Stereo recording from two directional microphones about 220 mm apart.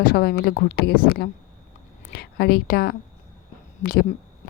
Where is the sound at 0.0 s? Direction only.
45° left (ahead or behind).